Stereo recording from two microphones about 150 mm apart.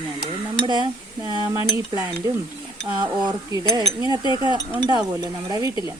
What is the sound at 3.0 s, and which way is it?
Speech, 30° right (ahead or behind).